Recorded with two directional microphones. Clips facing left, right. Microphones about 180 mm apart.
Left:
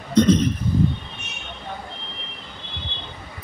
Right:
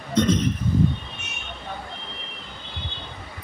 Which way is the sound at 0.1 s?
35° left (ahead or behind).